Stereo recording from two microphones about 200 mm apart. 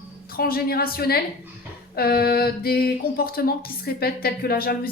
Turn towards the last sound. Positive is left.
turn(degrees=50)  # may be behind; listen again after turning